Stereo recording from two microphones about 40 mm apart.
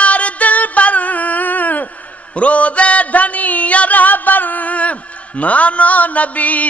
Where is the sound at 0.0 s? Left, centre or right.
Left.